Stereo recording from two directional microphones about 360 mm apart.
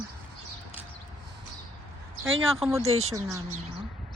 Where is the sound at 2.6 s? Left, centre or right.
Centre.